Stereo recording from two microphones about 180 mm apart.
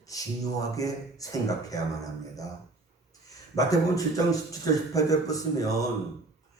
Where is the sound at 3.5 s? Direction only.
20° left (ahead or behind).